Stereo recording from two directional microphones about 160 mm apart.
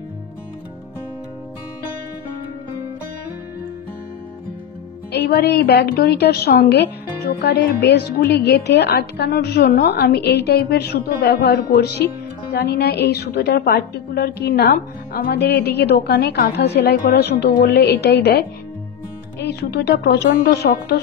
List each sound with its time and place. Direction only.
5.1 s a woman's voice: 90° left
19.6 s a woman's voice: 80° left